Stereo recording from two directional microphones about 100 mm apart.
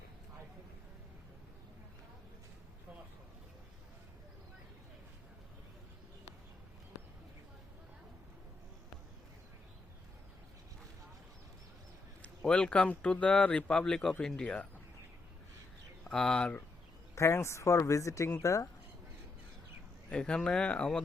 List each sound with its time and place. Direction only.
12.2 s speech: 10° left (ahead or behind)
16.0 s speech: 5° left (ahead or behind)
17.2 s speech: 25° left (ahead or behind)
20.1 s speech: 10° left (ahead or behind)